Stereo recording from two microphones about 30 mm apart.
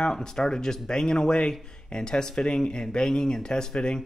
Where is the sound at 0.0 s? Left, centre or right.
Left.